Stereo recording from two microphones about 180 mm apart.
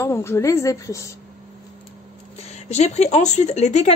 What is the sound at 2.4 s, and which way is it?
Speech, 40° left (ahead or behind).